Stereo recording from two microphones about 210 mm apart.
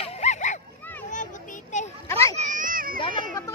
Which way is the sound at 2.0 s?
10° left (ahead or behind).